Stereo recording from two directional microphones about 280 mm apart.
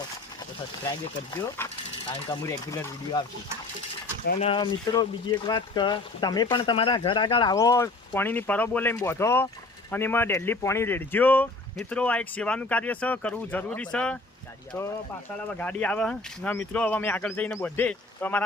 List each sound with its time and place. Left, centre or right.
0.9 s speech: centre
4.3 s speech: left; by 18.4 s centre